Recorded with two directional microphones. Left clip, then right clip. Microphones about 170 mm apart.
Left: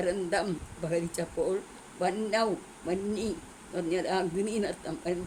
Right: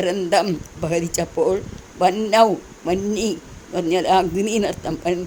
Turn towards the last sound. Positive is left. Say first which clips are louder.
# right 11 dB
turn(degrees=-40)  # may be behind; listen again after turning